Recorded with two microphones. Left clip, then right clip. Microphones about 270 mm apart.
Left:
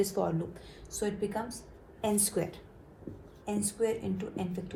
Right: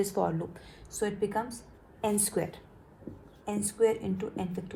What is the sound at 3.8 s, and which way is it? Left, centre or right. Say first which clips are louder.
Speech: right 5 dB; right.